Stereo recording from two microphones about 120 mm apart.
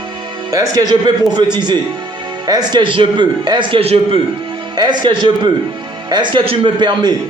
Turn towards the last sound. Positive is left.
turn(degrees=-40)  # may be behind; listen again after turning